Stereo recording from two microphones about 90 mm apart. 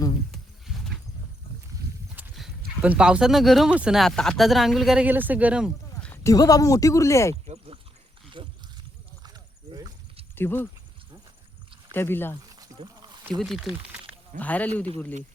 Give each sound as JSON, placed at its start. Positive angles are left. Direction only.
{"t": 0.3, "sound": "a sound", "side_deg": 5}
{"t": 2.2, "sound": "horse", "side_deg": -20}
{"t": 2.8, "sound": "speech", "side_deg": -10}
{"t": 4.0, "sound": "speech", "side_deg": 5}
{"t": 5.0, "sound": "speech", "side_deg": -20}
{"t": 6.2, "sound": "speech", "side_deg": 40}
{"t": 8.4, "sound": "a sound", "side_deg": -70}
{"t": 9.2, "sound": "horse", "side_deg": -45}
{"t": 10.3, "sound": "speech", "side_deg": 25}
{"t": 11.9, "sound": "speech", "side_deg": 25}
{"t": 12.7, "sound": "a sound", "side_deg": -60}
{"t": 13.4, "sound": "speech", "side_deg": 0}
{"t": 14.3, "sound": "speech", "side_deg": 15}